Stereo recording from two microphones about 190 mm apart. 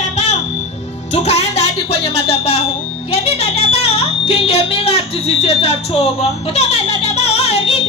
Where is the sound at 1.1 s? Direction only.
35° left (ahead or behind).